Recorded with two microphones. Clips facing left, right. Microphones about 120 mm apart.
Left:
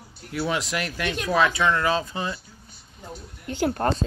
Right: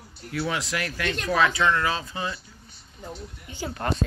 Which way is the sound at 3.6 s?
50° left (ahead or behind).